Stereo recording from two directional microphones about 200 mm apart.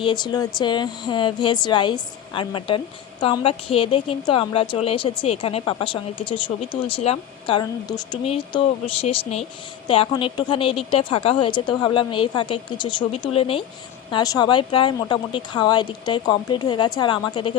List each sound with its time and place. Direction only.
0.0 s speech: 20° left (ahead or behind)
8.2 s speech: 30° left (ahead or behind)